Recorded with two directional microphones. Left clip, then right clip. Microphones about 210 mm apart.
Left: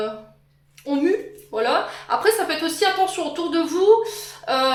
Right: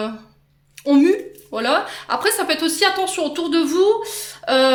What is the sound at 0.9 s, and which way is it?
Speech, 55° right (ahead or behind).